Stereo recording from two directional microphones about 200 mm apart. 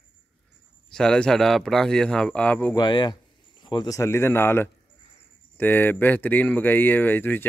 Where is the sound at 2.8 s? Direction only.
20° left (ahead or behind).